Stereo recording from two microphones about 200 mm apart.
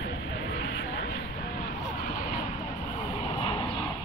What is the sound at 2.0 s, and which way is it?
Vehicle, 45° left (ahead or behind).